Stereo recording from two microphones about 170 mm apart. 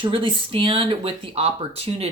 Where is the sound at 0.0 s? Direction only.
30° right (ahead or behind).